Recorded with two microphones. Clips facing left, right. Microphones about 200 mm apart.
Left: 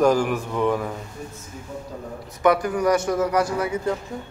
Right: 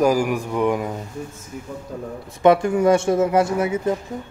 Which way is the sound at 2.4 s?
25° right (ahead or behind).